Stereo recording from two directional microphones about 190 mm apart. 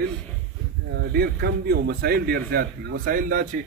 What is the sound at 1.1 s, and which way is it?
A man's voice, 55° right (ahead or behind).